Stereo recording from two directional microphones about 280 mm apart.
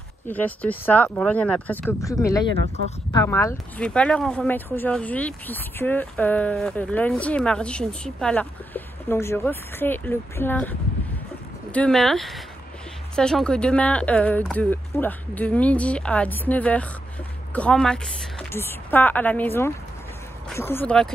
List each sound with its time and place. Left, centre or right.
0.3 s speech: centre
2.5 s speech: right
3.1 s speech: centre